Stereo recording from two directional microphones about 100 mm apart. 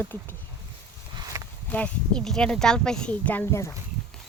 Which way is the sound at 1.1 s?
35° right (ahead or behind).